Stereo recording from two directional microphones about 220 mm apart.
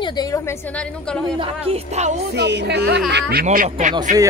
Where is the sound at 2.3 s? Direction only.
50° right (ahead or behind).